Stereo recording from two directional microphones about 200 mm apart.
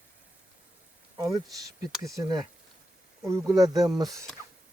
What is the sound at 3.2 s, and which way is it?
Speech, 15° right (ahead or behind).